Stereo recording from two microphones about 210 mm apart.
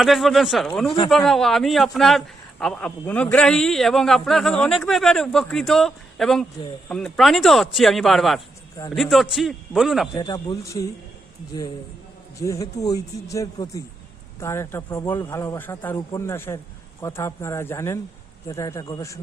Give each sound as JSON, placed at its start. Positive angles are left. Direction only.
{"t": 0.0, "sound": "a man's voice", "side_deg": 0}
{"t": 10.2, "sound": "a man's voice", "side_deg": 20}
{"t": 12.4, "sound": "a man's voice", "side_deg": 15}